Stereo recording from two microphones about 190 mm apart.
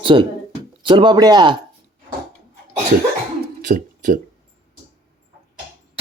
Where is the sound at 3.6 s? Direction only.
40° right (ahead or behind).